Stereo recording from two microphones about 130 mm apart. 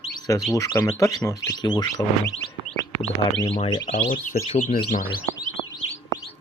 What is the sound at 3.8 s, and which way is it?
Speech, 80° left.